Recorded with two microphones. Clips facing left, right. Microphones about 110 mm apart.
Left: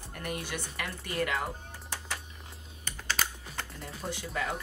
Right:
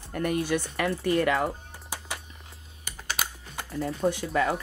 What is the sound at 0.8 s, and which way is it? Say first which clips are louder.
Speech: right 7 dB; 70° right (ahead or behind).